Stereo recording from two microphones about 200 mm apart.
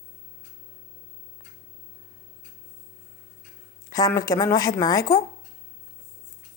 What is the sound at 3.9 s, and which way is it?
A woman's voice, 15° left (ahead or behind).